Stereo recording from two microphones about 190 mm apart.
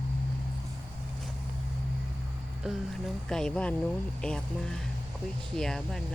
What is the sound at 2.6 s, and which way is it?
Speech, centre (ahead or behind).